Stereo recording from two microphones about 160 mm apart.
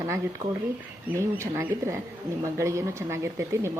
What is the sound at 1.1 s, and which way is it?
A woman's voice, 15° right (ahead or behind).